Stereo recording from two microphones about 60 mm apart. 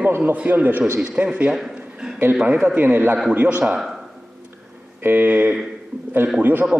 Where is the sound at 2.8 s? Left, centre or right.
Right.